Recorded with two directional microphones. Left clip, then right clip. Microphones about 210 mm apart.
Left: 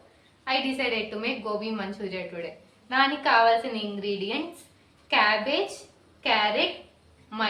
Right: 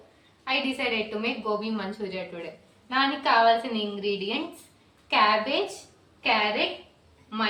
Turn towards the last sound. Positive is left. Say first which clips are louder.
# even
turn(degrees=20)  # may be behind; listen again after turning